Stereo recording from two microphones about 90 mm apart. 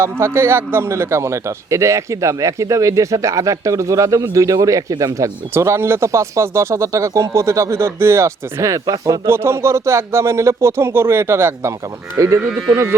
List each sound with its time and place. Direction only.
0.0 s a man's voice: 30° right (ahead or behind)